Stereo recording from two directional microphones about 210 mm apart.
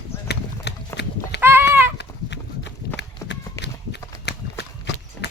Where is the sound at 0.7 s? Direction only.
55° left (ahead or behind).